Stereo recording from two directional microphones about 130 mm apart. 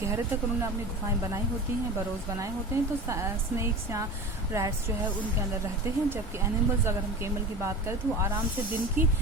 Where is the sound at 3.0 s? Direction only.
20° right (ahead or behind).